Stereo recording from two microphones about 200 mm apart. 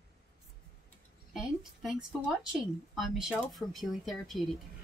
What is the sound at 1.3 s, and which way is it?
Speech, centre (ahead or behind).